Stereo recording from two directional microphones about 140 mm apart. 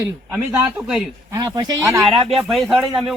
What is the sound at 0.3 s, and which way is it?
Speech, 10° right (ahead or behind).